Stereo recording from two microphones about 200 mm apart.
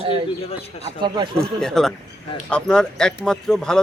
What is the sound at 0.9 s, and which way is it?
Speech, 25° right (ahead or behind).